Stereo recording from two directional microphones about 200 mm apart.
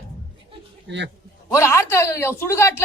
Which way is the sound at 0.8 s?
60° right (ahead or behind).